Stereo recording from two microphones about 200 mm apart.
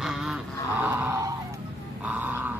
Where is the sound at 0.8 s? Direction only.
15° right (ahead or behind).